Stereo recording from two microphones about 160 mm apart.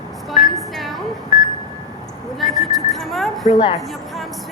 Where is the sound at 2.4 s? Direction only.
Centre (ahead or behind).